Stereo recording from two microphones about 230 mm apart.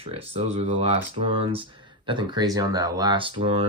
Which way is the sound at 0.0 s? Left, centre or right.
Right.